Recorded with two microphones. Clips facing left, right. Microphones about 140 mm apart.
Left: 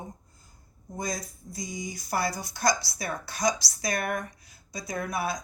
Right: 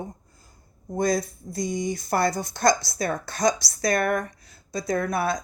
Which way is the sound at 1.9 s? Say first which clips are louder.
Right 4 dB; 55° right (ahead or behind).